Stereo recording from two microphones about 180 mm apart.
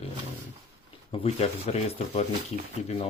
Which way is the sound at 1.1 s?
35° left (ahead or behind).